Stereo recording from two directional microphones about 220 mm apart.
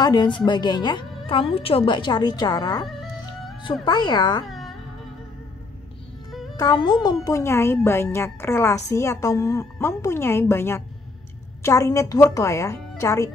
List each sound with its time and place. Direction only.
0.0 s a woman's voice: 20° left (ahead or behind)
4.5 s music: centre (ahead or behind)
6.5 s speech: 15° left (ahead or behind)